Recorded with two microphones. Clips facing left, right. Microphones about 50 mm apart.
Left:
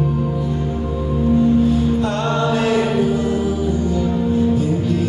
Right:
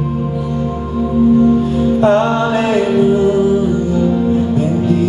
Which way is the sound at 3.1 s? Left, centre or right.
Right.